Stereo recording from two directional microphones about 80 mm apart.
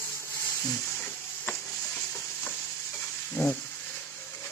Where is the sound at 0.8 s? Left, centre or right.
Left.